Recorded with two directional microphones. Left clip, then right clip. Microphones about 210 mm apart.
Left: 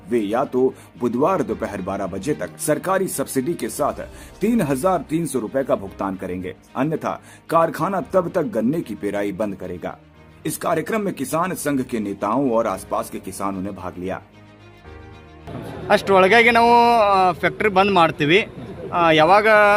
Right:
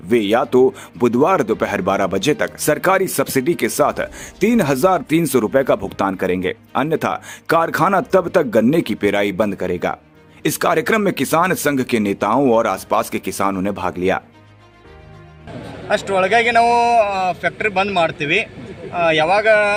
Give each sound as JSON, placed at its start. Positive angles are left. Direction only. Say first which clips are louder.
{"t": 0.1, "sound": "speech", "louder": "right 6 dB", "side_deg": -20}
{"t": 15.9, "sound": "a man's voice", "louder": "left 2 dB", "side_deg": 55}